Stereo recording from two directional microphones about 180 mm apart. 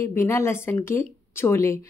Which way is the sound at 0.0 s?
15° left (ahead or behind).